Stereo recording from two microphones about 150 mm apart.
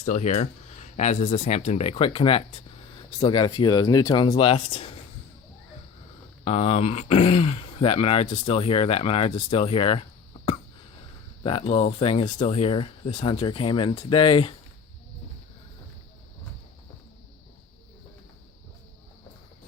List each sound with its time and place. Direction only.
0.0 s speech: 50° left (ahead or behind); by 4.9 s 35° left (ahead or behind)
6.4 s speech: 45° left (ahead or behind)
11.4 s speech: 40° left (ahead or behind)